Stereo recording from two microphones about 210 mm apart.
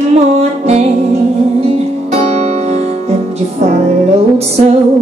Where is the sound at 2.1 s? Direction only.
30° right (ahead or behind).